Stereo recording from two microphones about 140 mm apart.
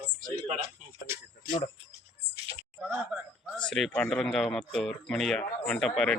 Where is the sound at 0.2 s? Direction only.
70° right (ahead or behind).